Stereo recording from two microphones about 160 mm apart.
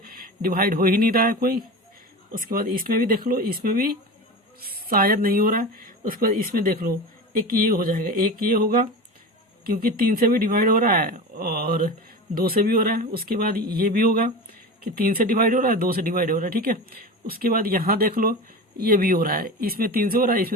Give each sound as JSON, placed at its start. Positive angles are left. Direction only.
{"t": 0.0, "sound": "speech", "side_deg": -65}